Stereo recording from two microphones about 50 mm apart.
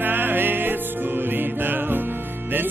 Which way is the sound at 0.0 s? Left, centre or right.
Right.